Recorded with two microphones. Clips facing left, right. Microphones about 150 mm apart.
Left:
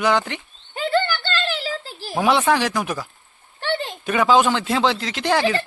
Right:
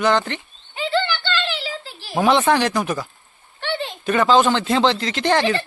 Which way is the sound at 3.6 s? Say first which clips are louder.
Left 1 dB; 45° left (ahead or behind).